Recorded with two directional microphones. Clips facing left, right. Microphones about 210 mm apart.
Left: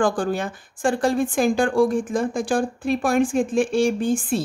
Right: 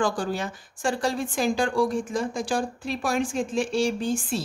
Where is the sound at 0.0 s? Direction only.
55° left (ahead or behind).